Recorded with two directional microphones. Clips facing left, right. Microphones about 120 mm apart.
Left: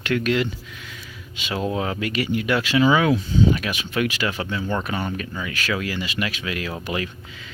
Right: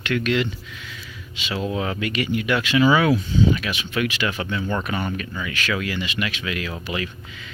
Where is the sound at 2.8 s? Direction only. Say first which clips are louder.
Right 1 dB; 25° left (ahead or behind).